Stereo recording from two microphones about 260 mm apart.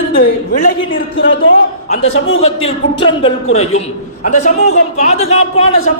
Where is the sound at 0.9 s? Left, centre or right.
Left.